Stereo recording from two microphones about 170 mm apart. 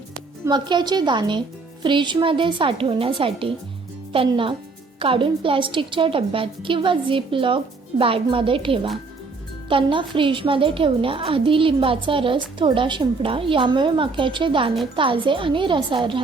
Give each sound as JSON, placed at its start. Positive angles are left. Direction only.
{"t": 0.4, "sound": "a woman's voice", "side_deg": -25}